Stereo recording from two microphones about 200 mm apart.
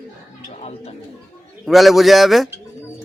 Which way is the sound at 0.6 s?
30° left (ahead or behind).